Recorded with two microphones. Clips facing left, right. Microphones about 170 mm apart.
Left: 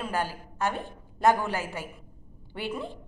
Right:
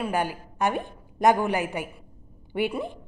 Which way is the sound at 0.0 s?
15° right (ahead or behind).